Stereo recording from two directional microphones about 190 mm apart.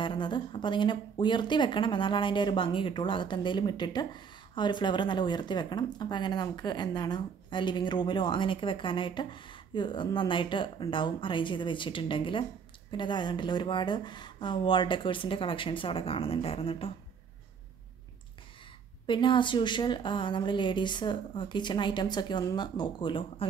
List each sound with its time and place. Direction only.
0.0 s speech: 25° left (ahead or behind)
19.0 s speech: 25° left (ahead or behind)